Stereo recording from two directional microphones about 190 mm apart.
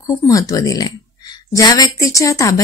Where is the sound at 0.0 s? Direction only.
15° left (ahead or behind).